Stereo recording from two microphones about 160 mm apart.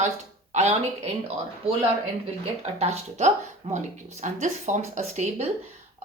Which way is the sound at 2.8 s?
40° right (ahead or behind).